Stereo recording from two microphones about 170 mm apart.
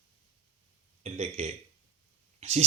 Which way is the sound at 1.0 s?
40° right (ahead or behind).